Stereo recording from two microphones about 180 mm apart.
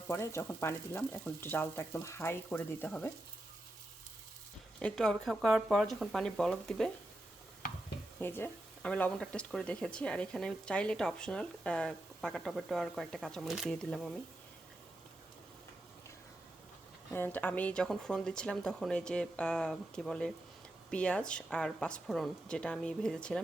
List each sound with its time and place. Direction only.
0.1 s speech: 15° left (ahead or behind)
4.8 s speech: 5° left (ahead or behind)
8.2 s speech: 10° left (ahead or behind)
17.1 s speech: 10° left (ahead or behind)